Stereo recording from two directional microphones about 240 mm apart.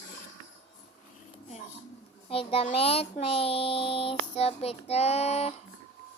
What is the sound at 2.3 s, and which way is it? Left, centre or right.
A child's voice, left.